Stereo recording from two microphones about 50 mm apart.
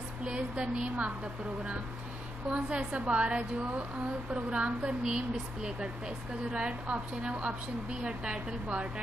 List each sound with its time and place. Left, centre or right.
0.2 s a woman's voice: right
2.5 s speech: right